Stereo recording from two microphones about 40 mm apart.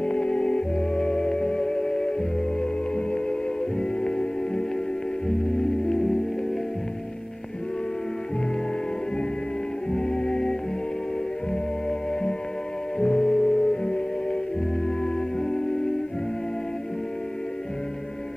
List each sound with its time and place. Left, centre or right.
0.0 s music: left
9.8 s music: centre
12.1 s music: left
15.4 s music: centre